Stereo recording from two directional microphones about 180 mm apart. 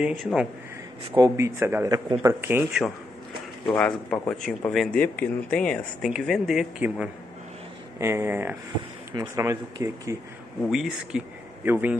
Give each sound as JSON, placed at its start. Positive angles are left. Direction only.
{"t": 0.0, "sound": "speech", "side_deg": 0}
{"t": 1.1, "sound": "a man's voice", "side_deg": -20}
{"t": 10.7, "sound": "speech", "side_deg": -5}